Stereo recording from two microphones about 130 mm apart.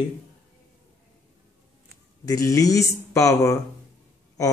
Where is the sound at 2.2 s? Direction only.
25° left (ahead or behind).